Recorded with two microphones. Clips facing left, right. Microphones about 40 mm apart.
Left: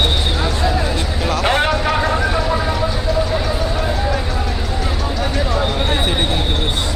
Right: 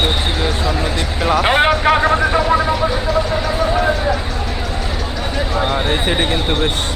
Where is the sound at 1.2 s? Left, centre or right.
Centre.